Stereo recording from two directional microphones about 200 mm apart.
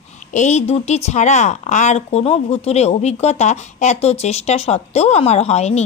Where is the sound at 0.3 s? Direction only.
35° left (ahead or behind).